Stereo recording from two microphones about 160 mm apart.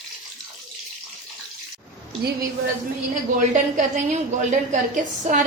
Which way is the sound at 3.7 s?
50° right (ahead or behind).